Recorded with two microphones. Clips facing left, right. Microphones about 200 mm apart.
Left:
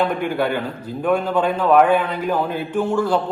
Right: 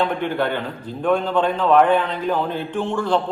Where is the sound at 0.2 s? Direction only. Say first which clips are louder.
Left 1 dB; 10° left (ahead or behind).